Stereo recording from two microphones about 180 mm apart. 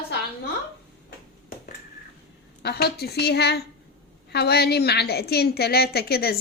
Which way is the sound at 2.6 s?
60° left (ahead or behind).